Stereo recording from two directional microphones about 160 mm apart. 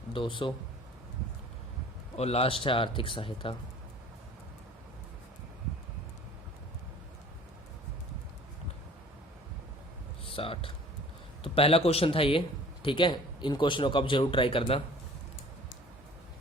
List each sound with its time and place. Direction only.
0.1 s speech: 30° left (ahead or behind)
2.1 s speech: 40° left (ahead or behind)
10.2 s speech: 35° left (ahead or behind)